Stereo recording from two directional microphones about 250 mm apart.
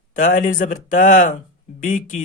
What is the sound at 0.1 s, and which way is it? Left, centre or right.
A man's voice, left.